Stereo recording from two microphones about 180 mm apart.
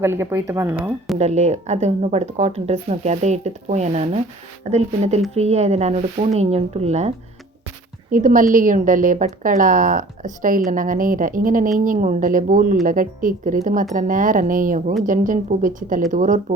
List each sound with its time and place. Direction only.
0.0 s speech: 15° right (ahead or behind)
1.2 s speech: 40° right (ahead or behind)
8.1 s a woman's voice: 50° right (ahead or behind)